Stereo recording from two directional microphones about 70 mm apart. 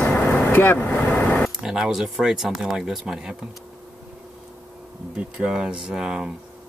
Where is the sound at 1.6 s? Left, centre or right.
Centre.